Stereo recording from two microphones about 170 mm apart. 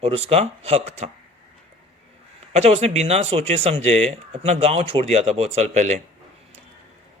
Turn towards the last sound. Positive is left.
turn(degrees=-40)  # may be behind; listen again after turning